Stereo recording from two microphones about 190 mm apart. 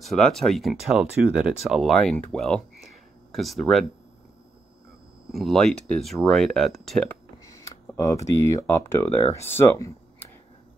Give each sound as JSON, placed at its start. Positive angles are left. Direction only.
{"t": 0.0, "sound": "speech", "side_deg": 0}
{"t": 5.3, "sound": "speech", "side_deg": 0}
{"t": 7.5, "sound": "speech", "side_deg": 15}